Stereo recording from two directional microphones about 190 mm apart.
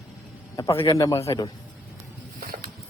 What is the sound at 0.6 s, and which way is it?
Speech, 15° left (ahead or behind).